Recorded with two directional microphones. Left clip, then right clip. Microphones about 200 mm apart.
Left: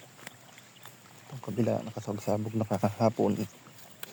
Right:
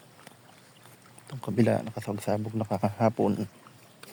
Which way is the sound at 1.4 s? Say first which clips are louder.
Right 4 dB; 35° right (ahead or behind).